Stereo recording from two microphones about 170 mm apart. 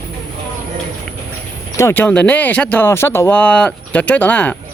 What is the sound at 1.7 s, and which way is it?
Speech, 15° left (ahead or behind).